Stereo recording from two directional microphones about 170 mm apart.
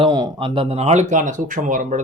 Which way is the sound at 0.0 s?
25° right (ahead or behind).